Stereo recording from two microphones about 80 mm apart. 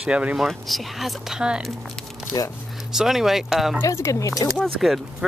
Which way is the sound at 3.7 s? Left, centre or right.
Left.